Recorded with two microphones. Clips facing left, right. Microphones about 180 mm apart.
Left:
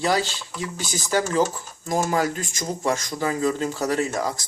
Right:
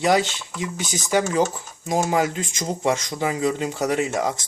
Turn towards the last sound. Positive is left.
turn(degrees=-20)  # may be behind; listen again after turning